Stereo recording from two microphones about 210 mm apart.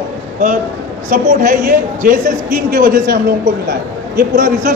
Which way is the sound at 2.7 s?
40° right (ahead or behind).